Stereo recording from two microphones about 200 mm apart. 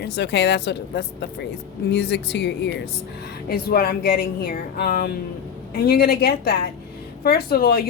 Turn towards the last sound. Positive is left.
turn(degrees=50)  # may be behind; listen again after turning